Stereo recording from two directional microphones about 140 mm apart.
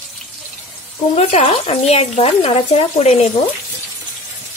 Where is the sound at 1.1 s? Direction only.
45° left (ahead or behind).